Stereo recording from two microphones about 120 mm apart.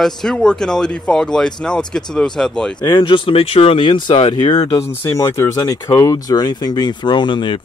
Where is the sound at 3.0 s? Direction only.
45° left (ahead or behind).